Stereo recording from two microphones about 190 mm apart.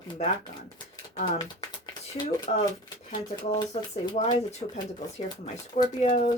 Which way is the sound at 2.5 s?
40° left (ahead or behind).